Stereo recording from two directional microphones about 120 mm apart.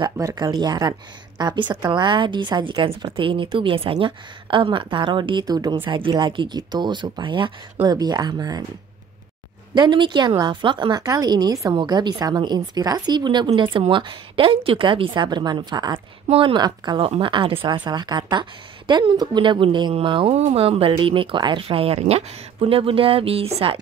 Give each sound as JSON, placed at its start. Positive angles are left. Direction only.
{"t": 0.2, "sound": "a woman's voice", "side_deg": -25}
{"t": 5.4, "sound": "a woman's voice", "side_deg": -30}
{"t": 5.9, "sound": "a woman's voice", "side_deg": -45}
{"t": 9.8, "sound": "a woman's voice", "side_deg": -40}
{"t": 16.3, "sound": "a woman's voice", "side_deg": -50}